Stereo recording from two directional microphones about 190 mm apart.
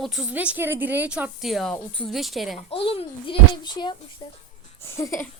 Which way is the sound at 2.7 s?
30° left (ahead or behind).